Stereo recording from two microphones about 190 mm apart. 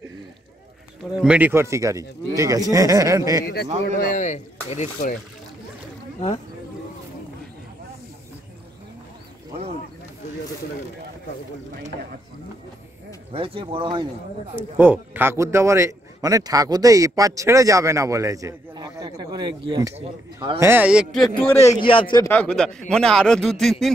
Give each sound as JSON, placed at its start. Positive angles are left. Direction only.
{"t": 1.2, "sound": "a man's voice", "side_deg": -5}
{"t": 3.6, "sound": "a man's voice", "side_deg": -35}
{"t": 4.1, "sound": "speech", "side_deg": 40}
{"t": 13.3, "sound": "speech", "side_deg": -30}
{"t": 14.5, "sound": "a man's voice", "side_deg": -10}
{"t": 21.5, "sound": "a man's voice", "side_deg": 15}